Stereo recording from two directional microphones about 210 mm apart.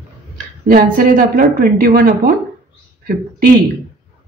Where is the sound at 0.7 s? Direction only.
45° right (ahead or behind).